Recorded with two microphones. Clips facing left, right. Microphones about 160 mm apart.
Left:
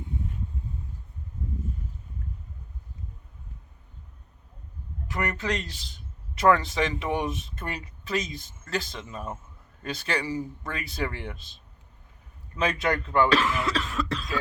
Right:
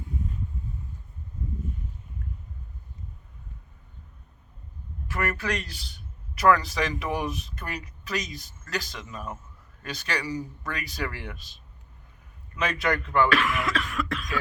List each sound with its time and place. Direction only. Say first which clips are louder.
5.0 s a man's voice: even; 20° left (ahead or behind)
12.5 s speech: left 1 dB; 25° left (ahead or behind)